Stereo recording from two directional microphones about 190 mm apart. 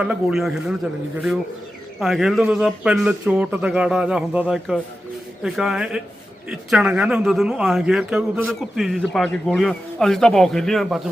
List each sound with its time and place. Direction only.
0.0 s a man's voice: 5° right (ahead or behind)
2.0 s a man's voice: centre (ahead or behind)